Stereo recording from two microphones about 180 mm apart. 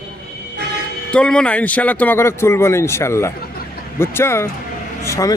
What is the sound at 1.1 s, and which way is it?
A man's voice, 5° left (ahead or behind).